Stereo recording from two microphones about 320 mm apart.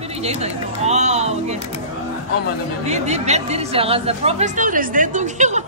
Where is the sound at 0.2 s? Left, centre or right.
Centre.